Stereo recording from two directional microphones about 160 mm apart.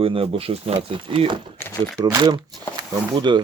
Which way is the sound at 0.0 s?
35° right (ahead or behind).